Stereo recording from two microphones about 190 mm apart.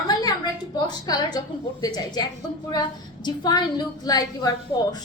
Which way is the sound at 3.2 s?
20° left (ahead or behind).